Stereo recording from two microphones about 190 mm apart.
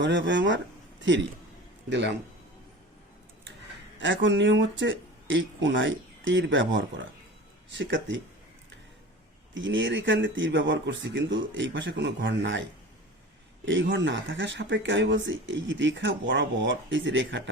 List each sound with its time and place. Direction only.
0.0 s speech: 70° right (ahead or behind)
4.0 s speech: 70° right (ahead or behind)
9.6 s speech: 80° right
13.7 s speech: 75° right (ahead or behind)